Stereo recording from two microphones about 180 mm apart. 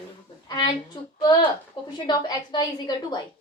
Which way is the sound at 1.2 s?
25° left (ahead or behind).